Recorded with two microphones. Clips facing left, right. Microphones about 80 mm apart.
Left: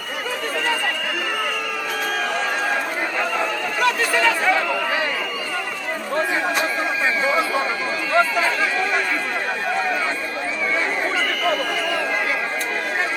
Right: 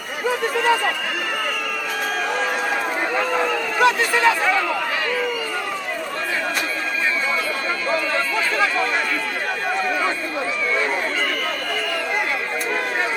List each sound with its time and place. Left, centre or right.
3.8 s speech: centre